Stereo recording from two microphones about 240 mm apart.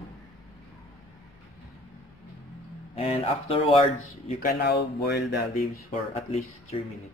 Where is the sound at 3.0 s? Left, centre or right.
Left.